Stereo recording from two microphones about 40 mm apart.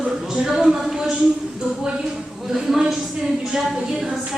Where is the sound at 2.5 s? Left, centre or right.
Centre.